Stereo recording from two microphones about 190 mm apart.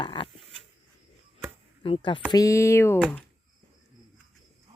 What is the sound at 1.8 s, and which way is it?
Speech, 25° left (ahead or behind).